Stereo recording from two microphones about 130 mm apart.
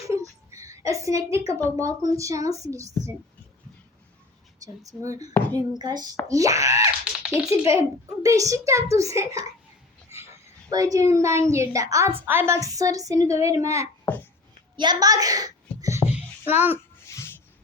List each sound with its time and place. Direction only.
0.0 s a sound: 25° right (ahead or behind)
1.7 s a child's voice: 25° right (ahead or behind)
4.6 s a child's voice: 25° right (ahead or behind)
5.3 s speech: 10° left (ahead or behind)
5.8 s a child's voice: 30° right (ahead or behind)
7.0 s a sound: 5° right (ahead or behind)
7.7 s a child's voice: 25° right (ahead or behind)
10.7 s a child's voice: 25° right (ahead or behind)
14.1 s speech: 15° left (ahead or behind)
14.8 s a child's voice: 30° right (ahead or behind); by 16.7 s 15° right (ahead or behind)
16.7 s a sound: 20° left (ahead or behind)